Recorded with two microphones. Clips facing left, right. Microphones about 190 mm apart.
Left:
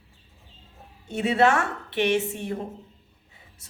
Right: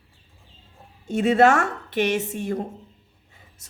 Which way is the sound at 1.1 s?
40° right (ahead or behind).